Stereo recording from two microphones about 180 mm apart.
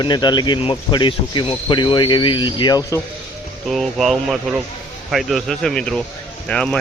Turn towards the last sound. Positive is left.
turn(degrees=5)  # may be behind; listen again after turning